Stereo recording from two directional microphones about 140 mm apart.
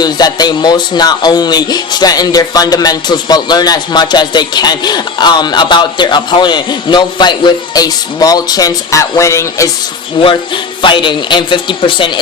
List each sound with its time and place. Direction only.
0.0 s speech: 30° left (ahead or behind)
10.2 s speech: 35° left (ahead or behind)